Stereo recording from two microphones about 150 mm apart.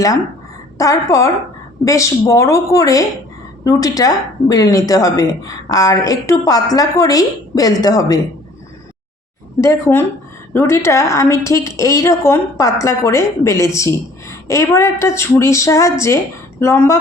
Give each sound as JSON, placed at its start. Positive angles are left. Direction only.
{"t": 0.8, "sound": "a woman's voice", "side_deg": 20}
{"t": 9.6, "sound": "a woman's voice", "side_deg": 20}